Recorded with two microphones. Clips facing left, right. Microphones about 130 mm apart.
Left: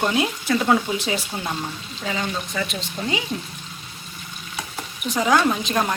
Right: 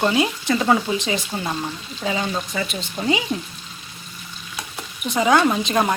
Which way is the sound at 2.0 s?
15° right (ahead or behind).